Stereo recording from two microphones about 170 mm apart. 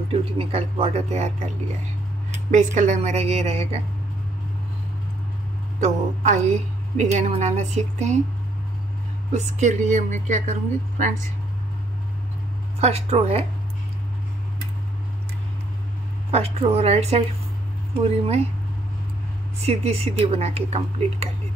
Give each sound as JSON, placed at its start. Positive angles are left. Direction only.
{"t": 0.1, "sound": "speech", "side_deg": -35}
{"t": 2.5, "sound": "speech", "side_deg": -45}
{"t": 5.8, "sound": "a woman's voice", "side_deg": -45}
{"t": 9.3, "sound": "a woman's voice", "side_deg": -40}
{"t": 12.8, "sound": "speech", "side_deg": -40}
{"t": 16.3, "sound": "speech", "side_deg": -35}
{"t": 19.6, "sound": "speech", "side_deg": -35}